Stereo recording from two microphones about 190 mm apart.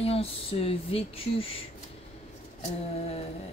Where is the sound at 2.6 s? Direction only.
35° left (ahead or behind).